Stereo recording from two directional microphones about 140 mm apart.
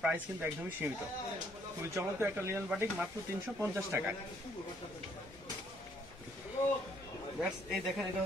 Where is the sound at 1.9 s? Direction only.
15° right (ahead or behind).